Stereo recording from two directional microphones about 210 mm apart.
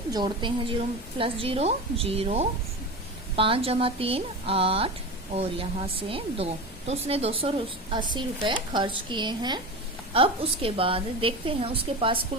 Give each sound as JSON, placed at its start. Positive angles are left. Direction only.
{"t": 0.1, "sound": "a woman's voice", "side_deg": -20}